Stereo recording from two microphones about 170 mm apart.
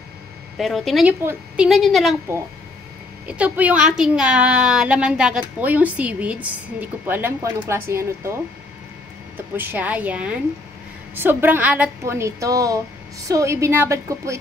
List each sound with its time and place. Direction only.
0.6 s a woman's voice: centre (ahead or behind)
3.3 s a woman's voice: 10° right (ahead or behind)
9.6 s a woman's voice: 10° right (ahead or behind)